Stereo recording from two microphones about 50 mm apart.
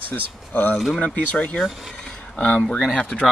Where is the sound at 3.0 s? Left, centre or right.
Centre.